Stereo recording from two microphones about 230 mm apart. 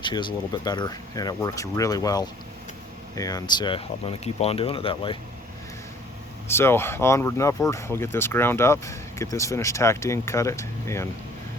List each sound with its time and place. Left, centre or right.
0.0 s speech: centre
6.5 s speech: centre